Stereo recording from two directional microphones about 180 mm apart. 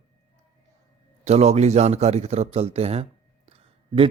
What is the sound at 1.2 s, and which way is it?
Speech, 35° right (ahead or behind).